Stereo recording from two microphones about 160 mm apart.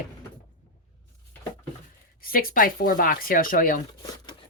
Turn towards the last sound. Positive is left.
turn(degrees=60)  # may be behind; listen again after turning